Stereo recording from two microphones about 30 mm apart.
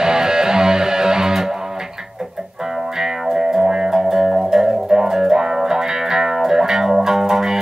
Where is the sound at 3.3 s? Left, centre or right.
Centre.